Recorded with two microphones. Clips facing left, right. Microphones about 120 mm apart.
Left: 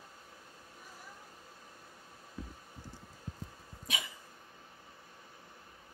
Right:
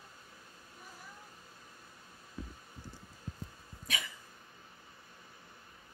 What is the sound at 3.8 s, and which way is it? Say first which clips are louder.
Cough: even; 20° left (ahead or behind).